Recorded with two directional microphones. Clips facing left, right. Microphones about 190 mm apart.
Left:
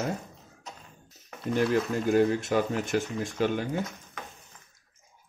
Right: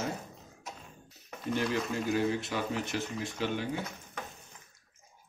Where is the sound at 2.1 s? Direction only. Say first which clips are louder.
Left 8 dB; 50° left (ahead or behind).